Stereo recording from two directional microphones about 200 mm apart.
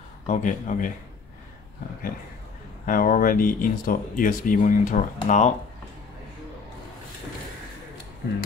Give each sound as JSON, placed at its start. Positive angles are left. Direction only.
{"t": 0.3, "sound": "a man's voice", "side_deg": 40}
{"t": 2.9, "sound": "speech", "side_deg": 45}